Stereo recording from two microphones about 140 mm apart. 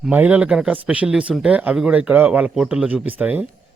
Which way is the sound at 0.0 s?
10° right (ahead or behind).